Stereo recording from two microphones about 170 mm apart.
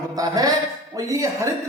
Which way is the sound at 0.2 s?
20° right (ahead or behind).